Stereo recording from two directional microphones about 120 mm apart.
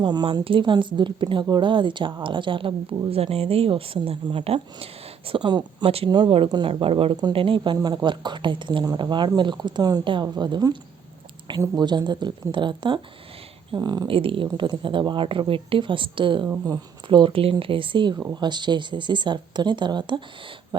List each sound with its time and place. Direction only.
0.0 s speech: 35° right (ahead or behind)
14.1 s speech: 50° right (ahead or behind)